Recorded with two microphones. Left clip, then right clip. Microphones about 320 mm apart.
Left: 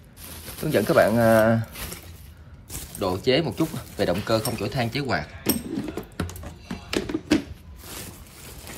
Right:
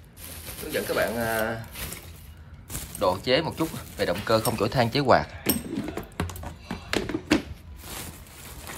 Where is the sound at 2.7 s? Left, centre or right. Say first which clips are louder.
Right 2 dB; centre.